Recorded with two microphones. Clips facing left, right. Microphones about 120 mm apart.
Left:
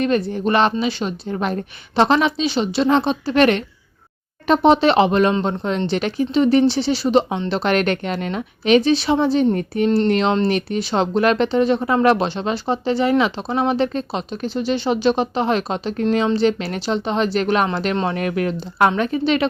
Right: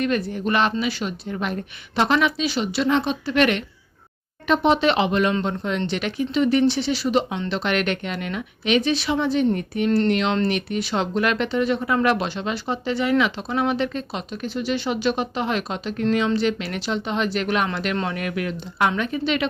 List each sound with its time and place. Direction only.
0.0 s speech: 30° left (ahead or behind)